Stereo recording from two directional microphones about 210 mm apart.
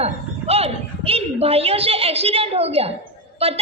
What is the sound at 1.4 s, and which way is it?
A woman's voice, 30° right (ahead or behind).